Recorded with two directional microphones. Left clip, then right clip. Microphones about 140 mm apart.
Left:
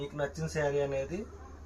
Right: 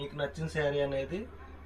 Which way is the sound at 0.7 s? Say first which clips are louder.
Even; 20° left (ahead or behind).